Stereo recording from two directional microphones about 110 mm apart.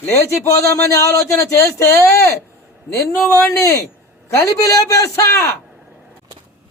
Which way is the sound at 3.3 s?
30° left (ahead or behind).